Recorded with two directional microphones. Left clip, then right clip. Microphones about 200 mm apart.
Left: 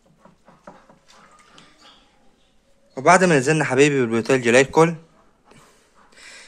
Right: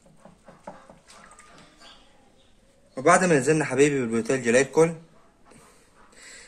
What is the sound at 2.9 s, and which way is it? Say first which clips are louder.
A man's voice: left 4 dB; 45° left (ahead or behind).